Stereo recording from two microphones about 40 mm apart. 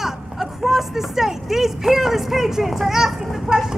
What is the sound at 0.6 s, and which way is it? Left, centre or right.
A child's voice, centre.